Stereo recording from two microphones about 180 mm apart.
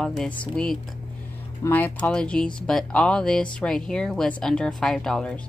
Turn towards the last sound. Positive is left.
turn(degrees=5)  # may be behind; listen again after turning